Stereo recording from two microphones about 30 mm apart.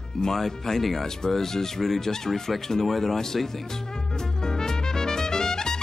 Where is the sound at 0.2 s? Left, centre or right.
Centre.